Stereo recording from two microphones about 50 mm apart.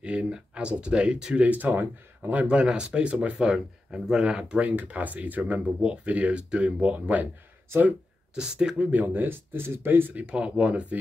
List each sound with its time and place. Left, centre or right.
0.0 s speech: right
2.4 s speech: centre
3.3 s speech: centre; by 7.2 s right
8.4 s speech: centre
8.9 s speech: right
10.1 s speech: right